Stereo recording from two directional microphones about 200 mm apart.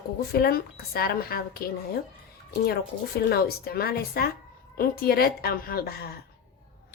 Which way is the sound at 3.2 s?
50° left (ahead or behind).